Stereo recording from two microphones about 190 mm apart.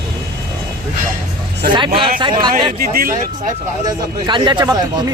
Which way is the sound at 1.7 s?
25° right (ahead or behind).